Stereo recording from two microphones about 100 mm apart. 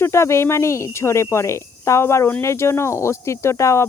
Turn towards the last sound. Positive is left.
turn(degrees=30)  # may be behind; listen again after turning